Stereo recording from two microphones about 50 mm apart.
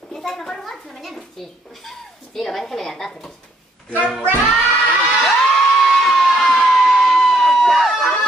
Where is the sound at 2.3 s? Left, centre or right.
Centre.